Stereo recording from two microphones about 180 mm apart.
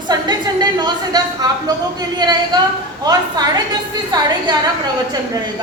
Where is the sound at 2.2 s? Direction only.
25° right (ahead or behind).